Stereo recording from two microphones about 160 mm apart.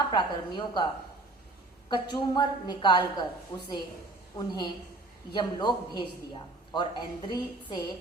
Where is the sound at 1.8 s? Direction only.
30° left (ahead or behind).